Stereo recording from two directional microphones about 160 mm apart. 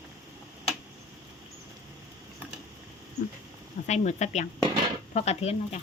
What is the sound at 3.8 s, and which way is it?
Speech, 45° left (ahead or behind).